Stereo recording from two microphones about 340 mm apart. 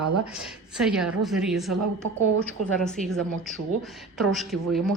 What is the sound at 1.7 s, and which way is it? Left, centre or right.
Speech, right.